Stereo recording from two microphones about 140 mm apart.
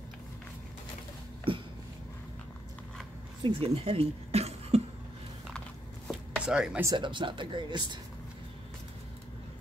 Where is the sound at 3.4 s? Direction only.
45° right (ahead or behind).